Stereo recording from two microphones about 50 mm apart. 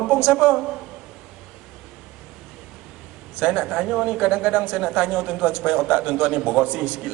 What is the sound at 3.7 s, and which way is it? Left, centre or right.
A man's voice, centre.